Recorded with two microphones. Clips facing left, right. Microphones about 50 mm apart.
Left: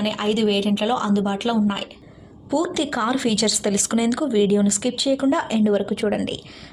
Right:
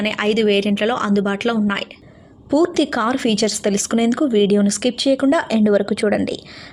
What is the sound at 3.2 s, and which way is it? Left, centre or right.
Speech, right.